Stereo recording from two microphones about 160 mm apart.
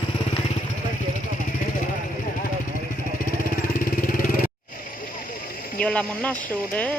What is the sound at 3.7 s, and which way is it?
Vehicle, 60° left (ahead or behind).